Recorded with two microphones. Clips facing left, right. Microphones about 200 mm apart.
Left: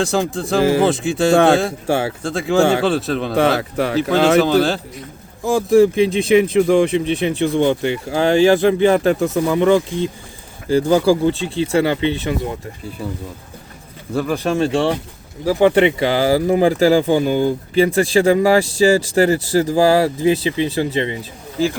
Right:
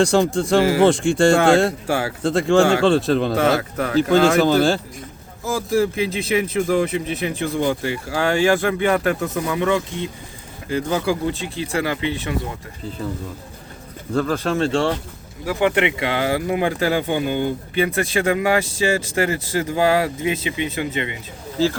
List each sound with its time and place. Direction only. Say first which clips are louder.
0.0 s speech: right 2 dB; centre (ahead or behind)
1.9 s speech: left 3 dB; 25° left (ahead or behind)
2.2 s speech: right 2 dB; centre (ahead or behind)
3.4 s speech: left 2 dB; 30° left (ahead or behind)
4.4 s speech: left 1 dB; centre (ahead or behind)
5.5 s speech: left 7 dB; 30° left (ahead or behind)
14.1 s speech: left 1 dB; 10° left (ahead or behind)
15.4 s speech: left 6 dB; 30° left (ahead or behind)